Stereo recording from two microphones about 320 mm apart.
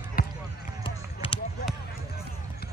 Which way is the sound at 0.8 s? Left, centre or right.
Centre.